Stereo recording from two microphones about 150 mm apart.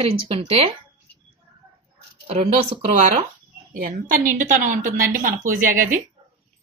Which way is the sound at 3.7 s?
65° right (ahead or behind).